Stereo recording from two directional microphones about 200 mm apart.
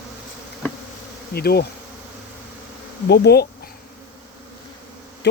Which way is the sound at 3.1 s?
55° left (ahead or behind).